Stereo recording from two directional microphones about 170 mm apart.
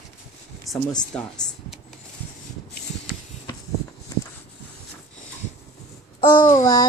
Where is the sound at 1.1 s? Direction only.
5° left (ahead or behind).